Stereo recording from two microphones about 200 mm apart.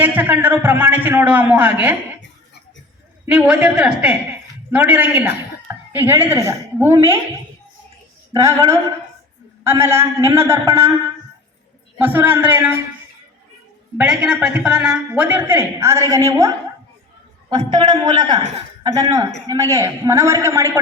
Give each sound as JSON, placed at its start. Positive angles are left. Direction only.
{"t": 0.0, "sound": "a man's voice", "side_deg": -10}
{"t": 3.2, "sound": "a woman's voice", "side_deg": -5}
{"t": 8.3, "sound": "a man's voice", "side_deg": -15}
{"t": 11.9, "sound": "a man's voice", "side_deg": -10}
{"t": 14.0, "sound": "a man's voice", "side_deg": -5}
{"t": 17.5, "sound": "a man's voice", "side_deg": -20}